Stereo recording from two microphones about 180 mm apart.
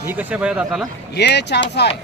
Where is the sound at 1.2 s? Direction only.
70° left (ahead or behind).